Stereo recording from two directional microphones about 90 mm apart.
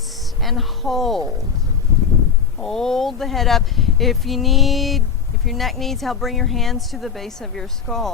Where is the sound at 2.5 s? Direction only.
5° left (ahead or behind).